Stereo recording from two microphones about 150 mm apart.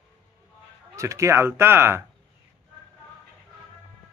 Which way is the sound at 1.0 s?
20° right (ahead or behind).